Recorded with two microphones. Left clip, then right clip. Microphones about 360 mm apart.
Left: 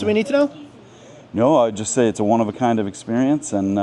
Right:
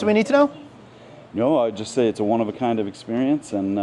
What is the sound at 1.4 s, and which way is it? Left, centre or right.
Speech, left.